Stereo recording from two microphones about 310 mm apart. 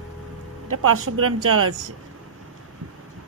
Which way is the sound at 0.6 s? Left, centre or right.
Right.